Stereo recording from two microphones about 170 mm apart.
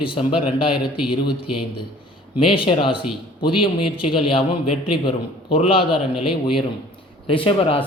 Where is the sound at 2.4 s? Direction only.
30° left (ahead or behind).